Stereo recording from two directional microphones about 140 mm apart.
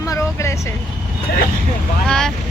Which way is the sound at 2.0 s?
5° left (ahead or behind).